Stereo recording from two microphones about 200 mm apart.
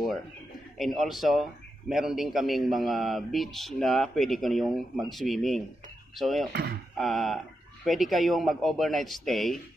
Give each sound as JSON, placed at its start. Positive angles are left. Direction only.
{"t": 0.7, "sound": "a man's voice", "side_deg": 0}
{"t": 6.5, "sound": "speech", "side_deg": -50}
{"t": 7.0, "sound": "a man's voice", "side_deg": 0}